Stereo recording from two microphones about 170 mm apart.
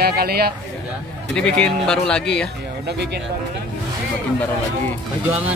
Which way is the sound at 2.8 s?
75° right (ahead or behind).